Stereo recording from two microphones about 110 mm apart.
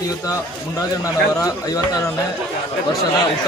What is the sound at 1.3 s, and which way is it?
Speech, 35° left (ahead or behind).